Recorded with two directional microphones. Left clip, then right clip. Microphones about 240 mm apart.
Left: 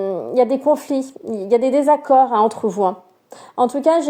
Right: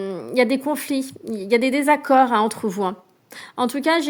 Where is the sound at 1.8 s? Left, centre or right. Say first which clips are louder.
Left 3 dB; right.